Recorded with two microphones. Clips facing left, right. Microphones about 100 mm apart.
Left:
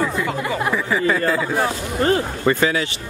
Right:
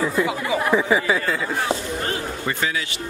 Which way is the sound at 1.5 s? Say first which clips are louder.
Left 3 dB; 40° left (ahead or behind).